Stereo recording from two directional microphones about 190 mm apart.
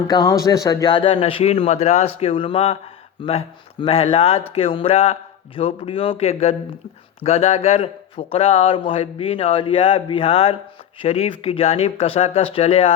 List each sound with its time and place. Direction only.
0.1 s a man's voice: 20° left (ahead or behind)